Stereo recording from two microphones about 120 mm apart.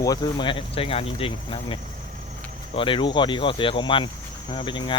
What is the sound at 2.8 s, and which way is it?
Speech, 45° left (ahead or behind).